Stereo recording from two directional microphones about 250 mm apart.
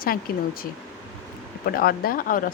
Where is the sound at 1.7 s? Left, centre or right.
Left.